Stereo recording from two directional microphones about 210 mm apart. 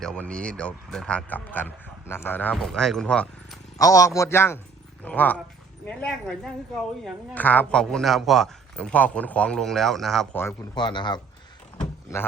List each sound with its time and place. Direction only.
0.0 s speech: 5° left (ahead or behind)
3.8 s a man's voice: 15° left (ahead or behind)
10.8 s a man's voice: 20° left (ahead or behind)